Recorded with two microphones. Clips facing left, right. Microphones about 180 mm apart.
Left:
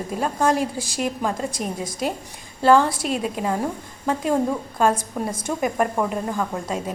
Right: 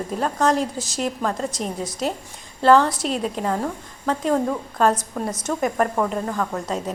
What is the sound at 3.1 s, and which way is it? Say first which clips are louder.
A woman's voice: even; 5° left (ahead or behind).